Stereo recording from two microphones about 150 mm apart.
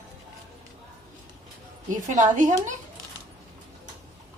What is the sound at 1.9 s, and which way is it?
Speech, 55° right (ahead or behind).